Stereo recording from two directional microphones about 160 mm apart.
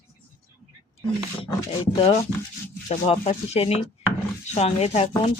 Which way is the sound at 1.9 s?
40° left (ahead or behind).